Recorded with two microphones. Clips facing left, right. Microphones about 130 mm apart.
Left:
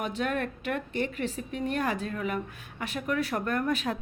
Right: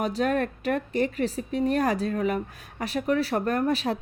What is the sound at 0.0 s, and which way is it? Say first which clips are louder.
A woman's voice: right 5 dB; 35° right (ahead or behind).